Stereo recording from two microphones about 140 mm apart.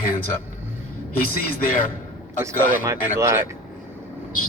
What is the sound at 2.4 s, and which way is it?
Speech, 20° right (ahead or behind).